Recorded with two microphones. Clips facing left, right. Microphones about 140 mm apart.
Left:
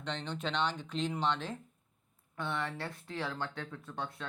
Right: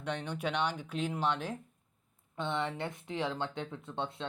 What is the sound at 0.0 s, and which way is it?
Speech, 10° right (ahead or behind).